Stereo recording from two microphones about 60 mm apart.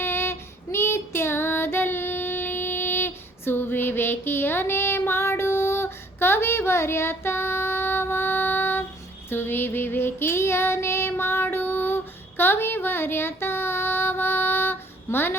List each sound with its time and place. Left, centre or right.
0.0 s child singing: left
9.3 s female singing: left
12.4 s child singing: left